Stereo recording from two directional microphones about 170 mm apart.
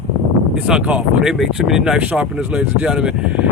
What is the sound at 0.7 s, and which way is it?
Speech, 5° right (ahead or behind).